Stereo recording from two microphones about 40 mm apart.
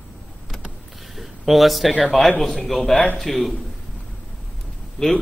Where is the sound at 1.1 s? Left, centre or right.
Centre.